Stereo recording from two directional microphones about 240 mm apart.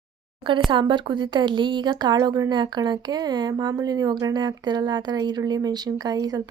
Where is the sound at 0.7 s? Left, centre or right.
Centre.